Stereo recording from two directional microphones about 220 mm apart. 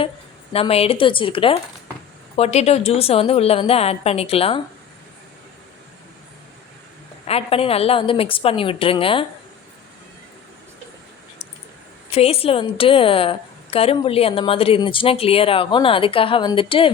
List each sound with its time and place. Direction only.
0.5 s a woman's voice: 25° left (ahead or behind)
7.3 s a woman's voice: 25° left (ahead or behind)
12.1 s a woman's voice: 25° left (ahead or behind)